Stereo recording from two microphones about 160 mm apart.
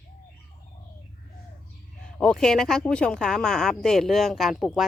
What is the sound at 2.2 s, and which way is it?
Speech, 5° left (ahead or behind).